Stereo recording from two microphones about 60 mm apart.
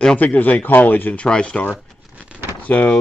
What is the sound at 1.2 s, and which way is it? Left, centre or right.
Speech, centre.